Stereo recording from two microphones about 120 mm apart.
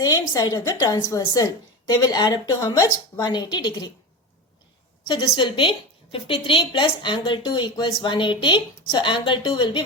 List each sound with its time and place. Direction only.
0.0 s a woman's voice: 30° left (ahead or behind)
5.0 s a woman's voice: 40° left (ahead or behind)